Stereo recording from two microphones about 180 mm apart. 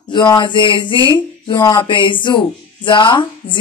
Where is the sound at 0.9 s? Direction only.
20° right (ahead or behind).